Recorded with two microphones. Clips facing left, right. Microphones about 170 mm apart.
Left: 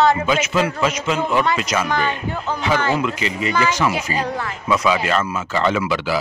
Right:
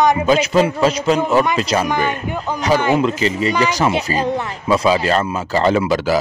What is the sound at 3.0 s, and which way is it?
Speech, 35° right (ahead or behind).